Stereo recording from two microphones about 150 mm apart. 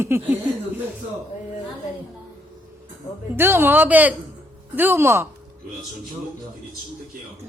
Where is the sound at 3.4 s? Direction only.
15° right (ahead or behind).